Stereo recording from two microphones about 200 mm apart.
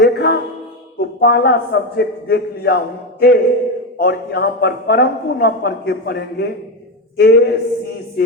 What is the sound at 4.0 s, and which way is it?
A man's voice, 50° left (ahead or behind).